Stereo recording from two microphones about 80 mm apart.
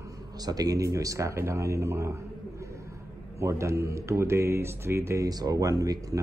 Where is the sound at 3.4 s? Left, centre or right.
Right.